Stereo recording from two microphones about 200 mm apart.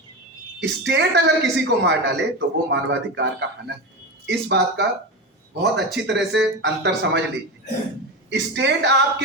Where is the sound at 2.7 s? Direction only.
60° right (ahead or behind).